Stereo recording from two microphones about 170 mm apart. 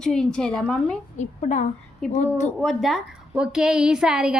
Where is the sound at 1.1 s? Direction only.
45° left (ahead or behind).